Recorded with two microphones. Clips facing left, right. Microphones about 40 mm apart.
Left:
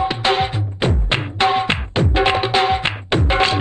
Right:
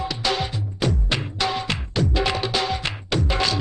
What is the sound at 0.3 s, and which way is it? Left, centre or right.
Music, left.